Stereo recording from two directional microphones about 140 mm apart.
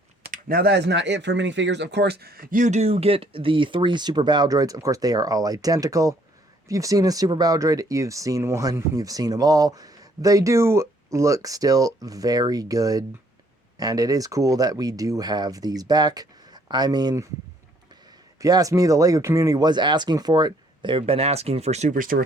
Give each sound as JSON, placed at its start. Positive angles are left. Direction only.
{"t": 0.3, "sound": "a sound", "side_deg": -90}
{"t": 2.2, "sound": "speech", "side_deg": -90}
{"t": 18.3, "sound": "speech", "side_deg": -25}